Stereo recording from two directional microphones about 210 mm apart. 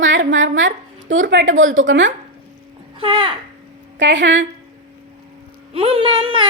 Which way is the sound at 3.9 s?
60° right (ahead or behind).